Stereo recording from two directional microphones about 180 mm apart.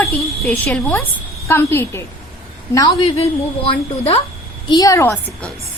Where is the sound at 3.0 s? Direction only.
35° left (ahead or behind).